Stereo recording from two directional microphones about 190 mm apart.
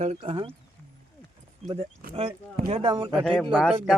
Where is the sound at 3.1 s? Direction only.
Centre (ahead or behind).